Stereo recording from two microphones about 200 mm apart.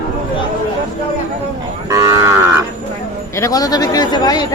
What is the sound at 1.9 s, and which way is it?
Moo, 15° right (ahead or behind).